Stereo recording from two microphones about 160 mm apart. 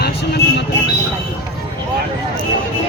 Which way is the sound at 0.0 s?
90° left.